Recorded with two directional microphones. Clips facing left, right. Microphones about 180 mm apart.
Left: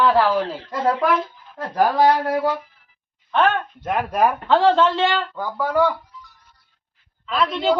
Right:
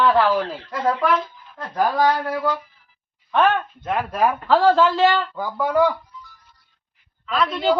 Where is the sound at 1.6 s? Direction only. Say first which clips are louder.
Left 2 dB; 30° left (ahead or behind).